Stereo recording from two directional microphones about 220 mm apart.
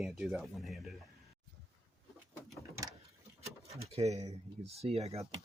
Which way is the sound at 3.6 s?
30° right (ahead or behind).